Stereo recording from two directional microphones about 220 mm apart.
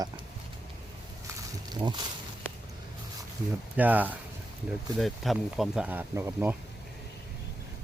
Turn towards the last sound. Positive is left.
turn(degrees=-10)  # may be behind; listen again after turning